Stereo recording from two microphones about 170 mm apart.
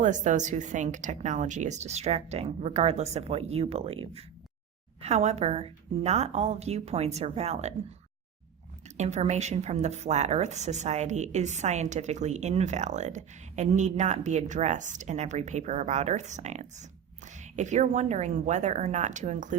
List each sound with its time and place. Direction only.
0.0 s a woman's voice: 45° right (ahead or behind)
9.0 s a woman's voice: 40° right (ahead or behind)